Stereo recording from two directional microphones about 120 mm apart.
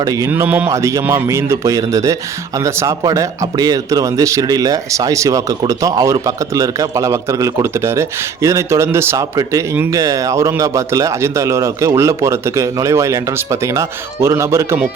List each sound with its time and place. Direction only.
0.0 s speech: 30° right (ahead or behind)
0.3 s speech: 15° right (ahead or behind)
0.7 s speech: 25° right (ahead or behind)